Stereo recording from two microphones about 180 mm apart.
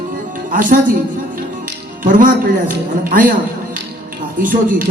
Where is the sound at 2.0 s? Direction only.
50° right (ahead or behind).